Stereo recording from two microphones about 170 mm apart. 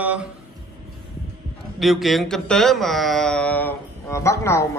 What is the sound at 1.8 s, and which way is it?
A man's voice, centre (ahead or behind).